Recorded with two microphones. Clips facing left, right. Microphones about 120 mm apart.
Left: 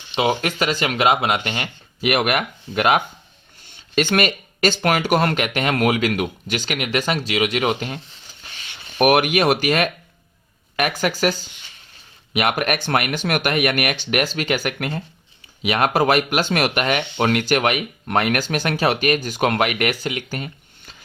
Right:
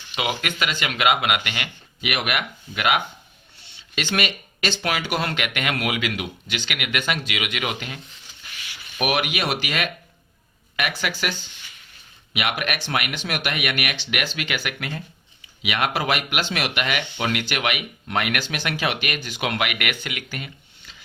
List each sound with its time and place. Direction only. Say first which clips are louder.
0.1 s speech: left 7 dB; 30° left (ahead or behind)
8.4 s a sound: left 1 dB; 30° left (ahead or behind)
9.0 s speech: left 8 dB; 50° left (ahead or behind)